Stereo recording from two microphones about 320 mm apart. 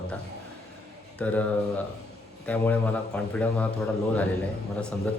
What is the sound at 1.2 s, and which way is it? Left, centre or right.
A man's voice, centre.